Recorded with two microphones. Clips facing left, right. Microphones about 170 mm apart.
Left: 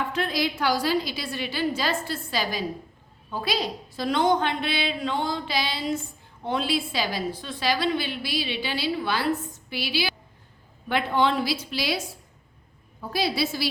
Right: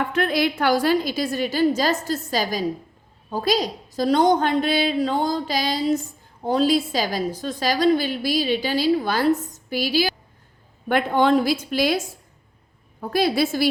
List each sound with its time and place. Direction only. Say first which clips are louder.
0.0 s a woman's voice: right 5 dB; 55° right (ahead or behind)